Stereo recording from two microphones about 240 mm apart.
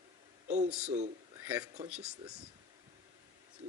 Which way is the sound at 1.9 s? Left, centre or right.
Centre.